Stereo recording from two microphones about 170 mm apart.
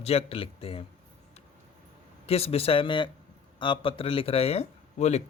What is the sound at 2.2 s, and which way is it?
Speech, 35° left (ahead or behind).